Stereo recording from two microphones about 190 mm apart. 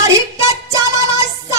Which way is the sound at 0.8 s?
15° right (ahead or behind).